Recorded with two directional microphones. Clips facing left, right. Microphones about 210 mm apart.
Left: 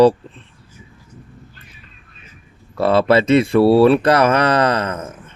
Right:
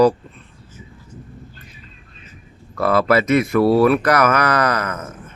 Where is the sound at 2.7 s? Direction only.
30° left (ahead or behind).